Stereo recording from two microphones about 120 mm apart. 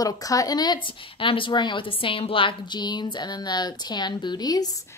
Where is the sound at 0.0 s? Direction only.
30° left (ahead or behind).